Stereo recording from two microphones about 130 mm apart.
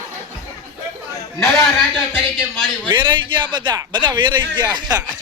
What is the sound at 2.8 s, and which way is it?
Speech, 40° right (ahead or behind).